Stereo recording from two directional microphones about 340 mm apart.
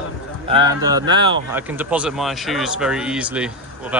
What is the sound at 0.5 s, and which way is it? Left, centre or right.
Speech, centre.